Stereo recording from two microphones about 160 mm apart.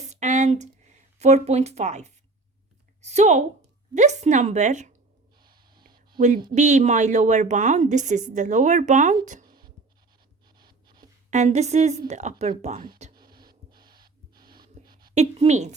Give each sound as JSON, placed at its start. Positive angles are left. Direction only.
{"t": 0.0, "sound": "a sound", "side_deg": -45}
{"t": 1.2, "sound": "a woman's voice", "side_deg": -45}
{"t": 3.0, "sound": "a sound", "side_deg": -45}
{"t": 3.9, "sound": "a woman's voice", "side_deg": -45}
{"t": 5.4, "sound": "gasp", "side_deg": -25}
{"t": 6.1, "sound": "a woman's voice", "side_deg": -50}
{"t": 9.5, "sound": "writing", "side_deg": -25}
{"t": 10.4, "sound": "a sound", "side_deg": -25}
{"t": 11.3, "sound": "a woman's voice", "side_deg": -45}
{"t": 13.1, "sound": "gasp", "side_deg": -30}
{"t": 15.1, "sound": "a woman's voice", "side_deg": -45}